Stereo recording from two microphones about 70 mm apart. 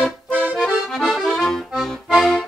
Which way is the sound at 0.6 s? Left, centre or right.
Centre.